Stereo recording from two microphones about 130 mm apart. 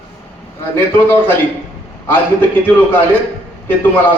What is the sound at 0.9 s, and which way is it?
Speech, 15° left (ahead or behind).